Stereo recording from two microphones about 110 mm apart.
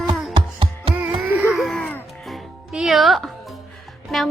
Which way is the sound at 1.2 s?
15° right (ahead or behind).